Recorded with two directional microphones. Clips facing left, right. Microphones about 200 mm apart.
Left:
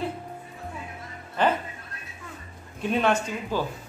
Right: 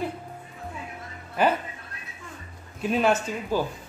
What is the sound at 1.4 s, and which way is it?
Speech, 10° right (ahead or behind).